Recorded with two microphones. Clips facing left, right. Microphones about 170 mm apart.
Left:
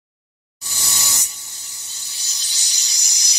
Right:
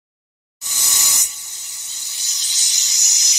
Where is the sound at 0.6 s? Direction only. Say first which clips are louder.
Left 1 dB; 20° right (ahead or behind).